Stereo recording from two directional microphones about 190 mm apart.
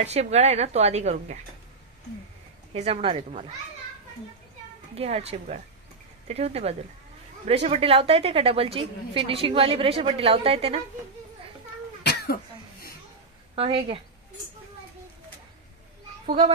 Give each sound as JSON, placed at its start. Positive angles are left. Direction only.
{"t": 0.0, "sound": "a woman's voice", "side_deg": -35}
{"t": 2.7, "sound": "a woman's voice", "side_deg": -30}
{"t": 4.9, "sound": "a woman's voice", "side_deg": -35}
{"t": 12.0, "sound": "cough", "side_deg": 60}
{"t": 13.6, "sound": "a woman's voice", "side_deg": -30}
{"t": 16.3, "sound": "a child's voice", "side_deg": -30}